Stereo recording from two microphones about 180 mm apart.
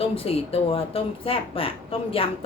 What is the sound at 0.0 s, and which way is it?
A woman's voice, 35° left (ahead or behind).